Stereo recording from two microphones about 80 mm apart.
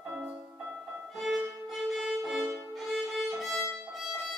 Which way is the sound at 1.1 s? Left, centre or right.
Centre.